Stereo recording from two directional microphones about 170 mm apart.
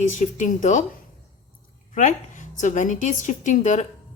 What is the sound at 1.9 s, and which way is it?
A woman's voice, 45° left (ahead or behind).